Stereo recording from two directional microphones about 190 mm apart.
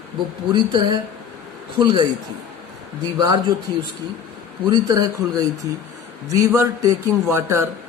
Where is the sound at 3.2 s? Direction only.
20° right (ahead or behind).